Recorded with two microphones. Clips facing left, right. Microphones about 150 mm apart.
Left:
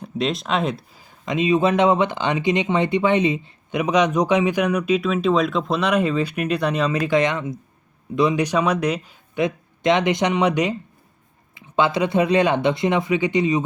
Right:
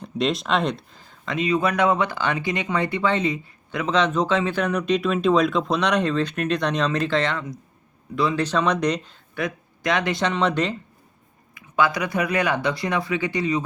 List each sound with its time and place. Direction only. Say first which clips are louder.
0.0 s speech: even; centre (ahead or behind)
1.2 s speech: left 4 dB; 20° left (ahead or behind)
9.3 s speech: left 6 dB; 20° left (ahead or behind)
11.5 s speech: left 2 dB; 25° left (ahead or behind)